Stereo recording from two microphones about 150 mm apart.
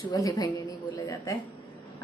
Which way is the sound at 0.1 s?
25° left (ahead or behind).